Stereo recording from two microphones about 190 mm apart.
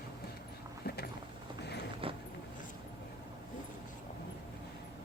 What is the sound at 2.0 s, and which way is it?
Vehicle, 30° right (ahead or behind).